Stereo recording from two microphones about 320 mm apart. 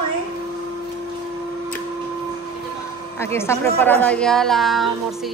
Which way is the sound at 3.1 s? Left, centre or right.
Centre.